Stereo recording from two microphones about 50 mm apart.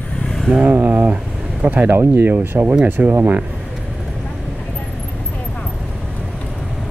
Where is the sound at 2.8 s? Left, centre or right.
Right.